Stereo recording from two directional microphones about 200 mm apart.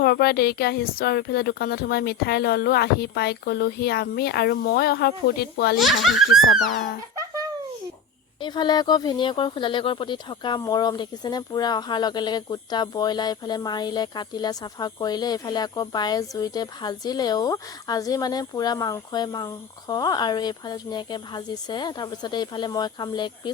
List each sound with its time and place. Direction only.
0.0 s speech: 50° left (ahead or behind)
5.8 s speech: centre (ahead or behind)
6.2 s speech: 90° left
8.4 s speech: 20° left (ahead or behind)